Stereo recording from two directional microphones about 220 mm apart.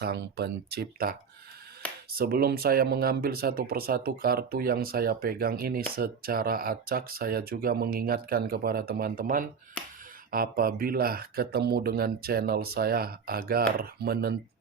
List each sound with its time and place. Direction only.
0.0 s speech: 45° right (ahead or behind)